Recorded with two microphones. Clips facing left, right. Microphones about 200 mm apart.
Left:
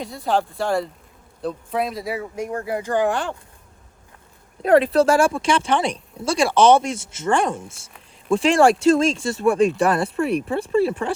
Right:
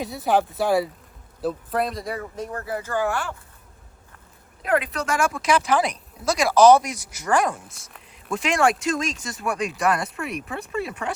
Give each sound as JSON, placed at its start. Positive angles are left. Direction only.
{"t": 0.0, "sound": "speech", "side_deg": -5}
{"t": 4.6, "sound": "speech", "side_deg": 30}